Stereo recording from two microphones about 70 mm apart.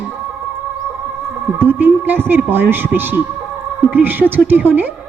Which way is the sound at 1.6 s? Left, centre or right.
Right.